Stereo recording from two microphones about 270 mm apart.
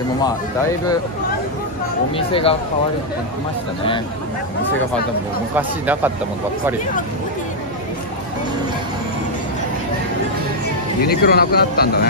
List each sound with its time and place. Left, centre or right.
2.1 s speech: centre
5.6 s speech: centre
11.1 s speech: left